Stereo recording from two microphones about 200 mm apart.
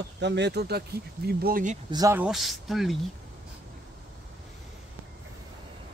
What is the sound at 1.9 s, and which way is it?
Speech, 20° right (ahead or behind).